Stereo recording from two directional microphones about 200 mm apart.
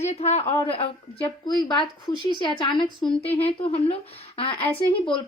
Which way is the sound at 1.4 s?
20° left (ahead or behind).